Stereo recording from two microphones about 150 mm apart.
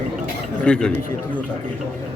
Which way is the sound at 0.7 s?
5° left (ahead or behind).